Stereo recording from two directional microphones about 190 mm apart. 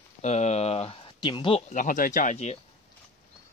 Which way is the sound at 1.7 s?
45° left (ahead or behind).